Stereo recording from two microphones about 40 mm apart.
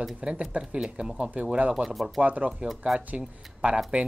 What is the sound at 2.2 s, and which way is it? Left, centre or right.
Speech, right.